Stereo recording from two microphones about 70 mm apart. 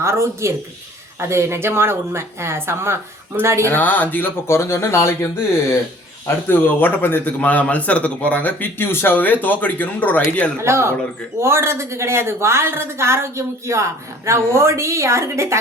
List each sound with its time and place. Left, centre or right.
0.0 s a woman's voice: right
3.7 s a man's voice: left
4.4 s speech: left
6.5 s a man's voice: left
10.6 s a woman's voice: right